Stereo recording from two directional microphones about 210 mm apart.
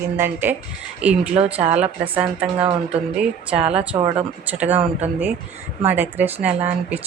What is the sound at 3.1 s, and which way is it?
Speech, 5° right (ahead or behind).